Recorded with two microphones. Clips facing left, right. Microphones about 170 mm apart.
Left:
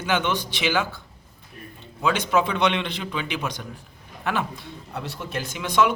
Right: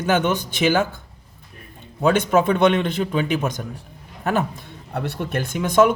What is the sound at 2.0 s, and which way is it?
Speech, 50° right (ahead or behind).